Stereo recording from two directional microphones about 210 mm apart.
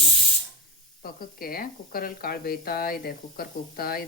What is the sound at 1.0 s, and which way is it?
Speech, 45° left (ahead or behind).